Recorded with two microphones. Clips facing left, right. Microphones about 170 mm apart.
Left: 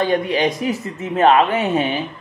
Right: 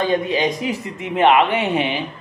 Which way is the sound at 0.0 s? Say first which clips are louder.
Left 1 dB; 20° right (ahead or behind).